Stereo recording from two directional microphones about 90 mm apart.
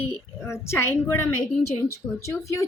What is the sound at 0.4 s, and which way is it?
Speech, 30° left (ahead or behind).